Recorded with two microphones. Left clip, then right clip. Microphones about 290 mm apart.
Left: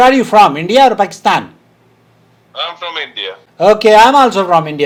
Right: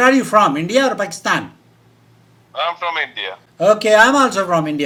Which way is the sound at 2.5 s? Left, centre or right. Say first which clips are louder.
Right 1 dB; left.